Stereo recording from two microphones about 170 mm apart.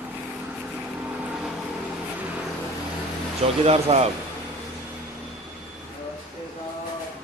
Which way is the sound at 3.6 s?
35° right (ahead or behind).